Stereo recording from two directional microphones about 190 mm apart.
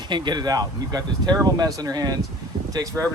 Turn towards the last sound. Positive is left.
turn(degrees=-20)  # may be behind; listen again after turning